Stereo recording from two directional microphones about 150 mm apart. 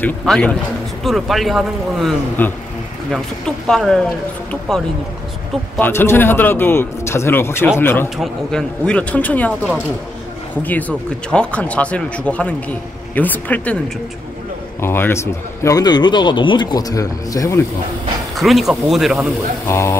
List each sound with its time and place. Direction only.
0.0 s speech: 5° left (ahead or behind)
2.4 s speech: 15° left (ahead or behind)
5.8 s speech: 15° left (ahead or behind)
14.8 s a man's voice: 15° left (ahead or behind)
18.3 s speech: centre (ahead or behind)
19.7 s a man's voice: 20° left (ahead or behind)